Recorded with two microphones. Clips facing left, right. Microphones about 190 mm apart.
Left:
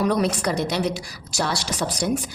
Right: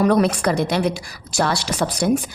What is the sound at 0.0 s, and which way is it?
A woman's voice, 60° right (ahead or behind).